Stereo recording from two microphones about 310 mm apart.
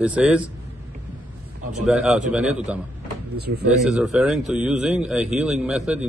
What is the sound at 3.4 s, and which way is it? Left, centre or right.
Speech, right.